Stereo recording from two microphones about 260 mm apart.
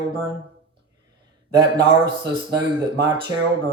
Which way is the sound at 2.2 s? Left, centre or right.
Centre.